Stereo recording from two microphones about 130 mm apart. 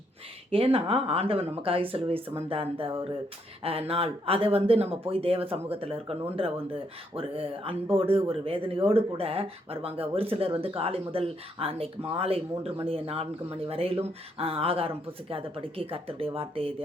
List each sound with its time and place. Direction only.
0.5 s speech: 45° right (ahead or behind)